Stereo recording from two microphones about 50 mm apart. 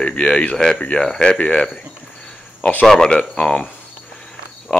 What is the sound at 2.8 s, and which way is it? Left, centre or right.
Speech, centre.